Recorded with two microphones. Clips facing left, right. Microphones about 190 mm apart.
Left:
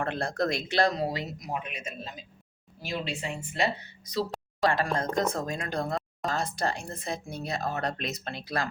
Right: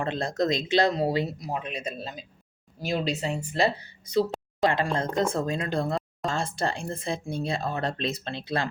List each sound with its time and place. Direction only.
0.0 s speech: 20° right (ahead or behind)